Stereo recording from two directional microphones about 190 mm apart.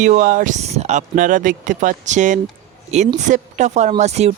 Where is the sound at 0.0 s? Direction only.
40° right (ahead or behind).